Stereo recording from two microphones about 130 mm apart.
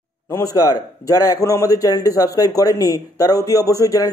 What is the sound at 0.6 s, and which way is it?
A man's voice, 25° left (ahead or behind).